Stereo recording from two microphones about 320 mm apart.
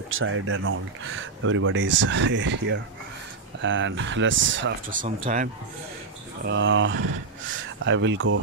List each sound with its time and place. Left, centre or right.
0.1 s speech: right
6.4 s speech: right